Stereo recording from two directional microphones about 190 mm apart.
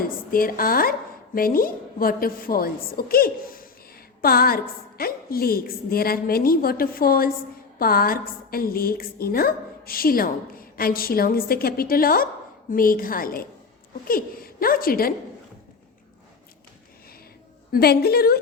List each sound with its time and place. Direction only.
0.0 s a woman's voice: 50° left (ahead or behind)
17.7 s a woman's voice: 55° left (ahead or behind)